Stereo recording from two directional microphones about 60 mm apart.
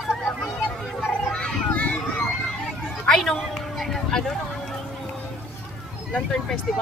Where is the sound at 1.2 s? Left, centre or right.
Centre.